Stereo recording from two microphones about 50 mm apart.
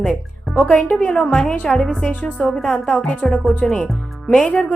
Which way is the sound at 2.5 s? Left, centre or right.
Centre.